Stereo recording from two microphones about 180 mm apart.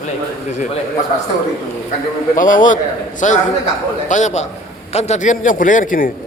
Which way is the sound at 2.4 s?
50° left (ahead or behind).